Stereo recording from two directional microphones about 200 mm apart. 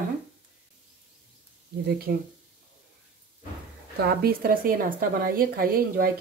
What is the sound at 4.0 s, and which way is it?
A woman's voice, 50° right (ahead or behind).